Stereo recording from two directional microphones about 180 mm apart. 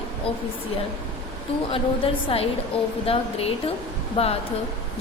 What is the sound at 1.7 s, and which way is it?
Speech, 30° left (ahead or behind).